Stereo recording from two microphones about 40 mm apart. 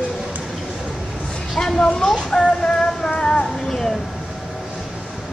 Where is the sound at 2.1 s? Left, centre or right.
Centre.